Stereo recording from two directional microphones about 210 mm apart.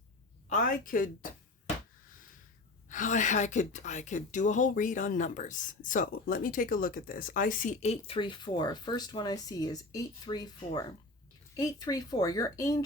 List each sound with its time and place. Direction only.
0.4 s speech: 40° left (ahead or behind)
2.9 s a woman's voice: 35° left (ahead or behind); by 12.8 s 15° left (ahead or behind)